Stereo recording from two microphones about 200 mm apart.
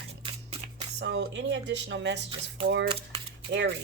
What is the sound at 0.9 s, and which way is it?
Speech, 60° right (ahead or behind).